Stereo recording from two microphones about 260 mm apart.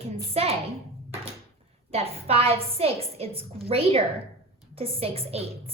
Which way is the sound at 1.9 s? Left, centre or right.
Right.